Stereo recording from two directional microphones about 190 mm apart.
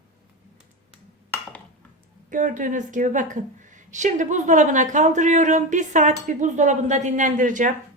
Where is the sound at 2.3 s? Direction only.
40° right (ahead or behind).